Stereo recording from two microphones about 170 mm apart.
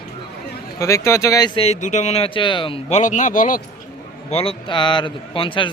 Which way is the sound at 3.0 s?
45° left (ahead or behind).